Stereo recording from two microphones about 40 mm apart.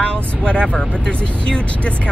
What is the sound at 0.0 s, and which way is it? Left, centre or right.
Vehicle, left.